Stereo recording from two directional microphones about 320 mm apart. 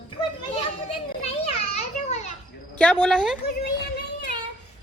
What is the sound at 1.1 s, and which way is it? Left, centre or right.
Children playing, left.